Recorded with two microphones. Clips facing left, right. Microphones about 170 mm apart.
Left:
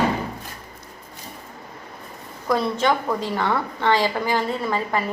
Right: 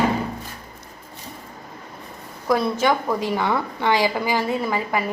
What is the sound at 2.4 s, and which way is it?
A woman's voice, 10° right (ahead or behind).